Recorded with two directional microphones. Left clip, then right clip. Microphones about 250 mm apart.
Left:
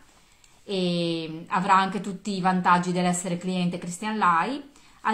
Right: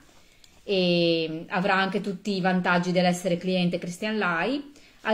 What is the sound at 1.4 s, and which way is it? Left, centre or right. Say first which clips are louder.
Speech: left 5 dB; left.